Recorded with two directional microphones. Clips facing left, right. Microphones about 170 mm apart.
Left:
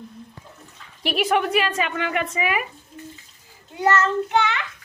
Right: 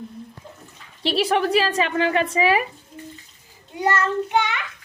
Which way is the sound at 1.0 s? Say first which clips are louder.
Right 1 dB; 30° right (ahead or behind).